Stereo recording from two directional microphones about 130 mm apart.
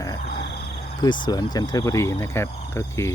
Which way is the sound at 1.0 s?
30° left (ahead or behind).